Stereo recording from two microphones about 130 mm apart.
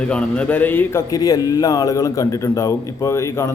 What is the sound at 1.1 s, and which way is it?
A man's voice, 30° left (ahead or behind).